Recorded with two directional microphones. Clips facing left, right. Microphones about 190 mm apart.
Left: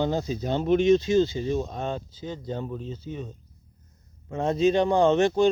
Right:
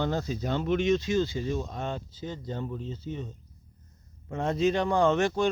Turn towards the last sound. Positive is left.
turn(degrees=20)  # may be behind; listen again after turning